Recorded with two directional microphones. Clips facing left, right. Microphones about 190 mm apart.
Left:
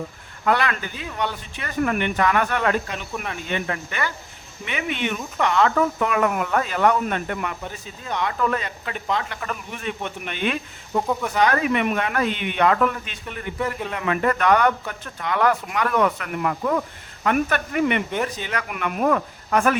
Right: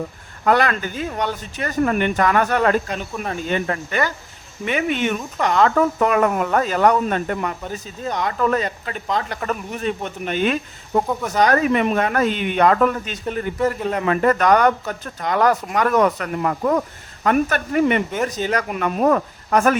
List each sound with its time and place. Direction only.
0.4 s speech: 45° right (ahead or behind)
10.9 s speech: 55° right (ahead or behind)
11.3 s speech: 40° right (ahead or behind)